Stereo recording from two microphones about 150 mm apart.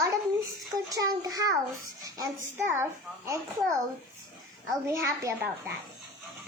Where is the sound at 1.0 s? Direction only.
25° right (ahead or behind).